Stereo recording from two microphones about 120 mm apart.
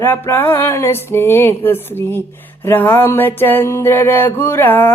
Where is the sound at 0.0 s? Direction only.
20° left (ahead or behind).